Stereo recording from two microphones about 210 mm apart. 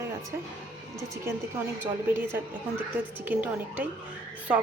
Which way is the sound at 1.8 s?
10° right (ahead or behind).